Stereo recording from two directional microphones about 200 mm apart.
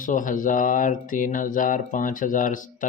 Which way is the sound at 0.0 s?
40° left (ahead or behind).